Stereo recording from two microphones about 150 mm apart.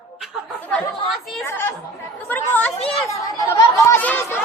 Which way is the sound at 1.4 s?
15° left (ahead or behind).